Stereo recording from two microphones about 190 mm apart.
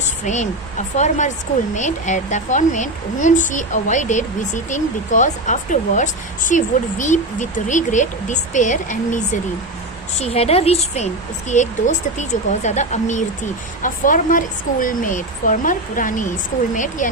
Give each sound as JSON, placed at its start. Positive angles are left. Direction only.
{"t": 0.3, "sound": "speech", "side_deg": 40}